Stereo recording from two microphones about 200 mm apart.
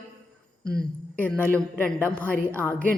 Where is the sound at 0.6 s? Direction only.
20° right (ahead or behind).